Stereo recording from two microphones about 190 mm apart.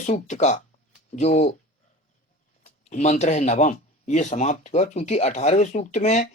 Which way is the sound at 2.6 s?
40° left (ahead or behind).